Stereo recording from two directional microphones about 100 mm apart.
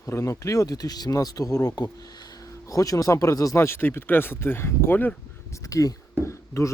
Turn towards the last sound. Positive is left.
turn(degrees=30)  # may be behind; listen again after turning